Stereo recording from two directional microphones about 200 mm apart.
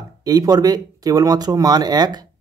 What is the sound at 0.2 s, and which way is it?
Speech, 20° right (ahead or behind).